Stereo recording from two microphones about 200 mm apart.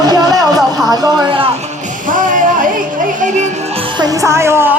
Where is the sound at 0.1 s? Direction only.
20° right (ahead or behind).